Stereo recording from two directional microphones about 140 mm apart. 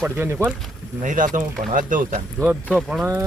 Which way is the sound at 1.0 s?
70° right (ahead or behind).